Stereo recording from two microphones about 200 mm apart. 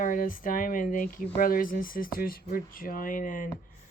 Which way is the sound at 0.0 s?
40° left (ahead or behind).